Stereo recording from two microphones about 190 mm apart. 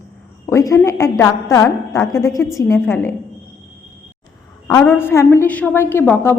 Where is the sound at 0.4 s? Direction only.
15° left (ahead or behind).